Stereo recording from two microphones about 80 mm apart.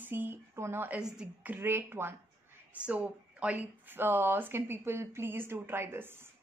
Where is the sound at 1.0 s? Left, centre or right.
Centre.